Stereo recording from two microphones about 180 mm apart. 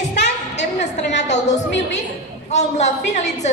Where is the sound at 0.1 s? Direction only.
70° left (ahead or behind).